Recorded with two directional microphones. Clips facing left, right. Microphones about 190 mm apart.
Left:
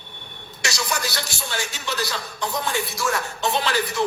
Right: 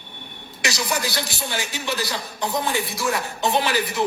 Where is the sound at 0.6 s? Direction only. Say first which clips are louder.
Right 2 dB; 15° right (ahead or behind).